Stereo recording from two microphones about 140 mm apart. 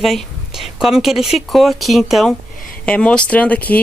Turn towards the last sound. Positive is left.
turn(degrees=10)  # may be behind; listen again after turning